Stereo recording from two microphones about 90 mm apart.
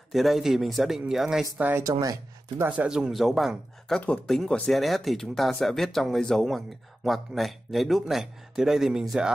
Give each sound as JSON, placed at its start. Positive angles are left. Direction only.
{"t": 0.1, "sound": "speech", "side_deg": 0}
{"t": 1.8, "sound": "speech", "side_deg": -40}
{"t": 2.8, "sound": "speech", "side_deg": -10}